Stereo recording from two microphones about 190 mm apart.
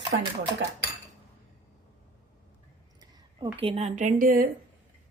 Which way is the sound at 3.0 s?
25° right (ahead or behind).